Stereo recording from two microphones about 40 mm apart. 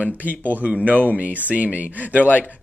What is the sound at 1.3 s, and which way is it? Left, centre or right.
Speech, right.